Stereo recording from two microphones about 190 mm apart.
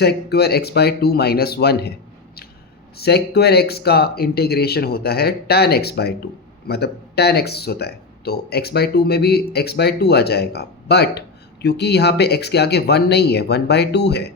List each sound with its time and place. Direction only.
0.0 s speech: 60° left (ahead or behind)
3.0 s speech: 60° left (ahead or behind)